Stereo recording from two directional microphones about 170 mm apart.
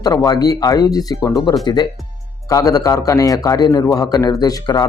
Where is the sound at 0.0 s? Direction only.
20° left (ahead or behind).